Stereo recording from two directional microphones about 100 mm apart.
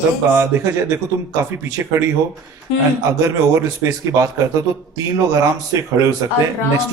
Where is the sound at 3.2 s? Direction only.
30° right (ahead or behind).